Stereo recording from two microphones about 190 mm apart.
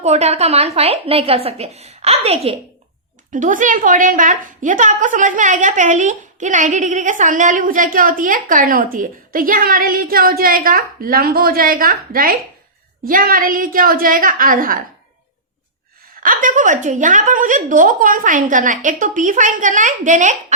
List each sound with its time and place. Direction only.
0.0 s a woman's voice: 35° right (ahead or behind)
16.2 s a woman's voice: 45° right (ahead or behind)